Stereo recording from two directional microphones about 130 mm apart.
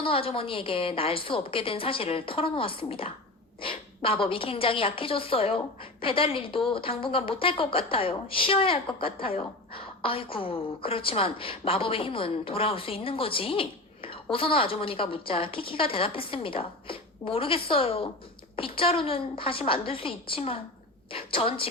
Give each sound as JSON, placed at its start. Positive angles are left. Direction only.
{"t": 0.0, "sound": "a woman's voice", "side_deg": 45}